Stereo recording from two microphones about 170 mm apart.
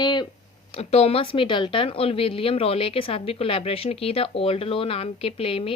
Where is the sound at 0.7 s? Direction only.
40° left (ahead or behind).